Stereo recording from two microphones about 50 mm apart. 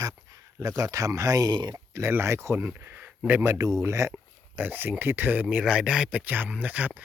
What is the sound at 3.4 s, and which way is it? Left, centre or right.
Speech, right.